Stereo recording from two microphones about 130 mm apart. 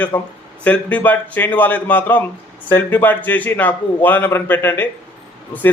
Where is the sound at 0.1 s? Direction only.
25° left (ahead or behind).